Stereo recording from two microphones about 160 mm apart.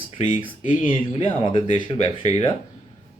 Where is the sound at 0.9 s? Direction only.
30° left (ahead or behind).